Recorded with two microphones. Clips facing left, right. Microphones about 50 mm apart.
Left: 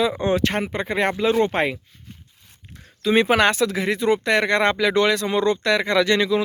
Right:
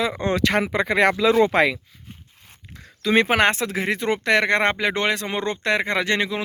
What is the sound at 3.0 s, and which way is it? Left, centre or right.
Speech, right.